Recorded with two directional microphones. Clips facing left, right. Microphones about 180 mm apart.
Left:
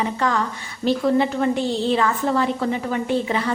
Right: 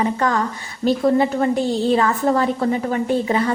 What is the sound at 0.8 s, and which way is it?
A woman's voice, 40° right (ahead or behind).